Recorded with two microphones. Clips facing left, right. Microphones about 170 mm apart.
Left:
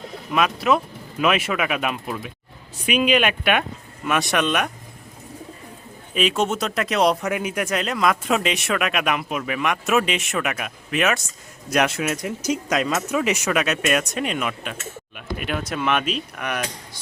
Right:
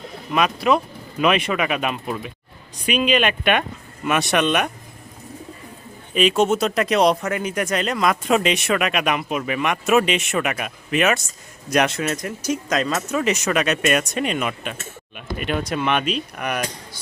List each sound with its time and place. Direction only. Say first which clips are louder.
0.3 s speech: right 1 dB; centre (ahead or behind)
6.1 s speech: right 4 dB; centre (ahead or behind)